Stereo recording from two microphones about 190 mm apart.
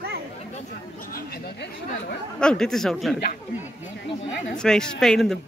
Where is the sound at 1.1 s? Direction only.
55° left (ahead or behind).